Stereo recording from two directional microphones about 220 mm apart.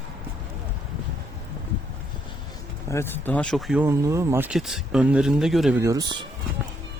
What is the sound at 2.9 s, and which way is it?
Speech, 10° left (ahead or behind).